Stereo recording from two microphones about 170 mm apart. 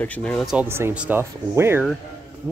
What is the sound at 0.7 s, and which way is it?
Speech, 15° right (ahead or behind).